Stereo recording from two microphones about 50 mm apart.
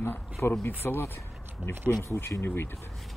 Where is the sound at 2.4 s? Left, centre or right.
Left.